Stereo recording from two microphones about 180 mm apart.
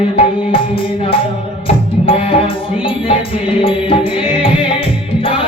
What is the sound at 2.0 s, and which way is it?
Music, 30° left (ahead or behind).